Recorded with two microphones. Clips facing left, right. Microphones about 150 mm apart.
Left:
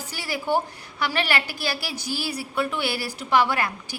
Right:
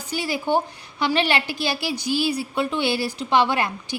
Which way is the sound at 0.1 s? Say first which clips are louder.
Right 3 dB; 20° right (ahead or behind).